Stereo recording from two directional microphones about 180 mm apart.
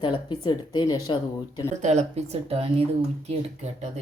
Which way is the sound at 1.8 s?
35° right (ahead or behind).